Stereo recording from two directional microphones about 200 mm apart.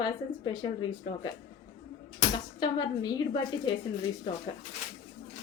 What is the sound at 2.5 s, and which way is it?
A woman's voice, 20° left (ahead or behind).